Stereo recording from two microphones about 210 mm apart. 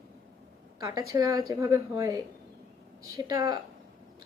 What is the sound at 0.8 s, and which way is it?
A woman's voice, 15° right (ahead or behind).